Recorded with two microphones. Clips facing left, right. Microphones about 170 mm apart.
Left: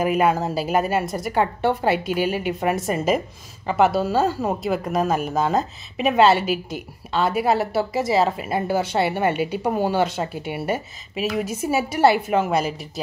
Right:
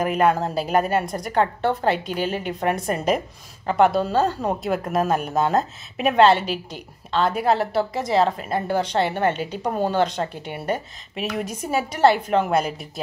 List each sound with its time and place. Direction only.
0.0 s speech: 5° left (ahead or behind)